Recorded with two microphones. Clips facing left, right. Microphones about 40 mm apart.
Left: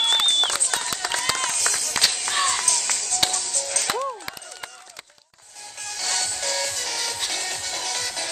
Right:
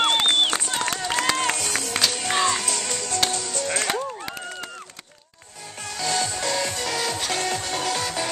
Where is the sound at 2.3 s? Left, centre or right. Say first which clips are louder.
Right 4 dB; centre.